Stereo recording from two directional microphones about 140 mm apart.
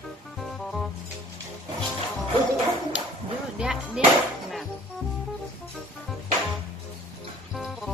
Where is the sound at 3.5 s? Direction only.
5° right (ahead or behind).